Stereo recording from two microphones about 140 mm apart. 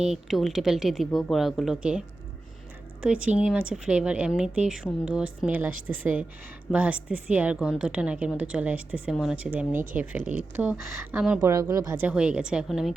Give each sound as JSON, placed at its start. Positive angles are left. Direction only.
{"t": 0.0, "sound": "a woman's voice", "side_deg": 0}
{"t": 11.4, "sound": "a woman's voice", "side_deg": -25}
{"t": 12.0, "sound": "speech", "side_deg": -5}